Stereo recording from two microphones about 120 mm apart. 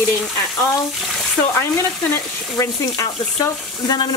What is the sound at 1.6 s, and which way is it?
Speech, 20° left (ahead or behind).